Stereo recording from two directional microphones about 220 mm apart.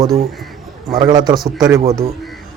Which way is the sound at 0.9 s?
20° right (ahead or behind).